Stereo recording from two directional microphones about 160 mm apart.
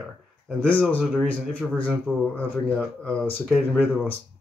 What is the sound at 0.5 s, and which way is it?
Speech, 10° left (ahead or behind).